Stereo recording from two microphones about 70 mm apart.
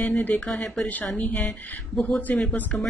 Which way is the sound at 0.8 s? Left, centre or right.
Left.